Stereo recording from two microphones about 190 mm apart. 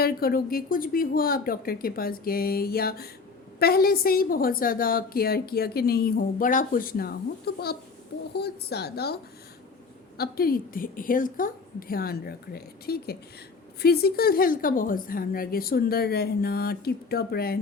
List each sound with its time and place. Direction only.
0.0 s a woman's voice: 55° left (ahead or behind)
10.2 s a woman's voice: 50° left (ahead or behind)